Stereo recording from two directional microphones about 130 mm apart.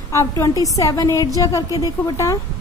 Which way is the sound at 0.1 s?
25° left (ahead or behind).